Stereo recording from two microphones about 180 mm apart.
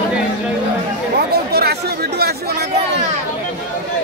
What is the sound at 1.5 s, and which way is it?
Chatter, 60° right (ahead or behind).